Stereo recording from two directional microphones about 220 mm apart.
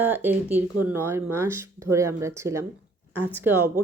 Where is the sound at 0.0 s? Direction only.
10° right (ahead or behind).